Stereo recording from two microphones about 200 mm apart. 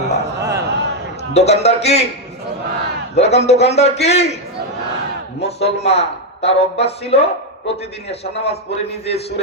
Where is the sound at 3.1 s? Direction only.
30° left (ahead or behind).